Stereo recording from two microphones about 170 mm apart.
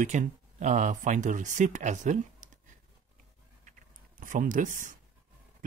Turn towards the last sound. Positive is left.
turn(degrees=-50)  # may be behind; listen again after turning